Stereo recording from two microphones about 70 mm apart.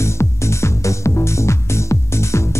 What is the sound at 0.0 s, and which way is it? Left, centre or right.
Music, left.